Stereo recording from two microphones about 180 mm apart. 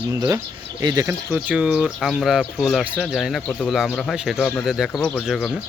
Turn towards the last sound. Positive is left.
turn(degrees=0)  # may be behind; listen again after turning